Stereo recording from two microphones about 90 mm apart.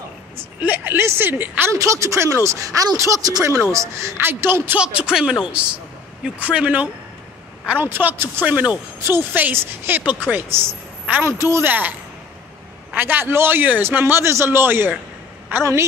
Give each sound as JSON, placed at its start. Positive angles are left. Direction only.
{"t": 0.6, "sound": "a man's voice", "side_deg": -20}
{"t": 1.7, "sound": "speech", "side_deg": -35}
{"t": 3.7, "sound": "a man's voice", "side_deg": -35}
{"t": 4.7, "sound": "a man's voice", "side_deg": -10}
{"t": 12.9, "sound": "a man's voice", "side_deg": -20}